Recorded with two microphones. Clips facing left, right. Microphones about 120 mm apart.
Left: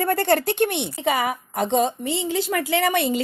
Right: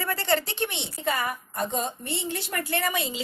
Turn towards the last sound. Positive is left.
turn(degrees=65)  # may be behind; listen again after turning